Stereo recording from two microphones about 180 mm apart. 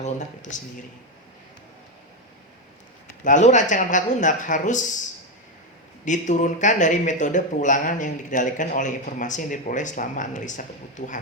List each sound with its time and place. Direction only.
0.0 s speech: 45° left (ahead or behind)
3.2 s speech: 45° left (ahead or behind)
6.1 s speech: 40° left (ahead or behind)